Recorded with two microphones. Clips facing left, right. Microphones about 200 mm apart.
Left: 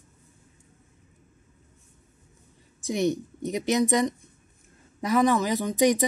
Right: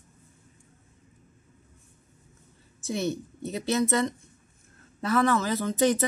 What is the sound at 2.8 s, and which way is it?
Speech, 15° left (ahead or behind).